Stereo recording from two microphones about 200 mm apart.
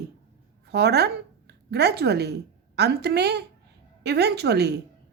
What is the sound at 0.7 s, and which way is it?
A woman's voice, 55° right (ahead or behind).